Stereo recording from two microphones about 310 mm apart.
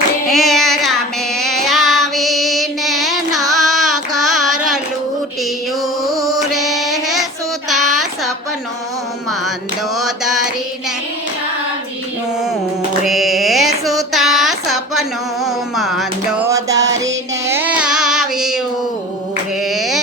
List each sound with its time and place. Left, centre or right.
0.3 s child singing: centre
6.5 s child singing: centre
10.0 s a sound: centre
13.1 s mantra: centre
14.1 s a sound: centre
15.4 s music: centre
16.7 s music: right
17.5 s carnatic music: centre